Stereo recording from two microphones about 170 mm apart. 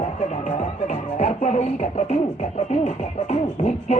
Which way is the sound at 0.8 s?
50° left (ahead or behind).